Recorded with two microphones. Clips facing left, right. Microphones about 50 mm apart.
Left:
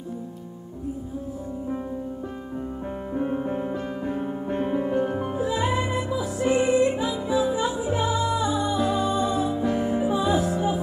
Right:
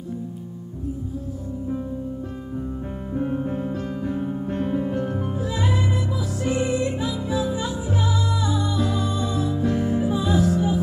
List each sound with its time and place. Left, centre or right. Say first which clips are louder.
3.2 s music: right 1 dB; centre